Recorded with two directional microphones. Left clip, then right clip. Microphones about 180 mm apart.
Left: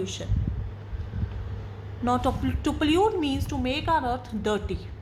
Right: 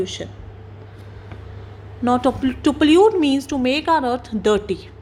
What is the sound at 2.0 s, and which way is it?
Speech, 25° right (ahead or behind).